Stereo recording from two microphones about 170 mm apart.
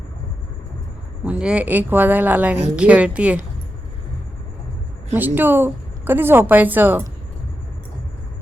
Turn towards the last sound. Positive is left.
turn(degrees=-10)  # may be behind; listen again after turning